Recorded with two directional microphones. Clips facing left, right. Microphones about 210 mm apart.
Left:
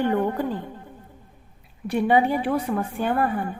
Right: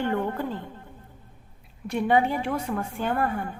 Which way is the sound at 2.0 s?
15° left (ahead or behind).